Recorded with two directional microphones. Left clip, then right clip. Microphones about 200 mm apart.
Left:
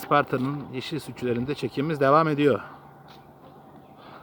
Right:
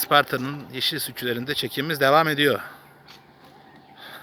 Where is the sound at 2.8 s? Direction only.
Centre (ahead or behind).